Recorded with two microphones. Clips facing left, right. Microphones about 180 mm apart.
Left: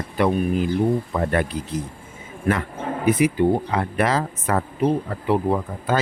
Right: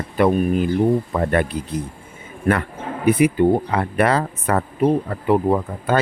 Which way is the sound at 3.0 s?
60° right (ahead or behind).